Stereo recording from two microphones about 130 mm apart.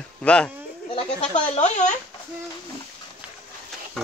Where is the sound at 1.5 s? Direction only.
60° left (ahead or behind).